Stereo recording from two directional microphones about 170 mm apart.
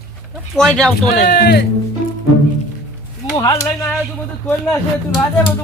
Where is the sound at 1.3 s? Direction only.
70° left (ahead or behind).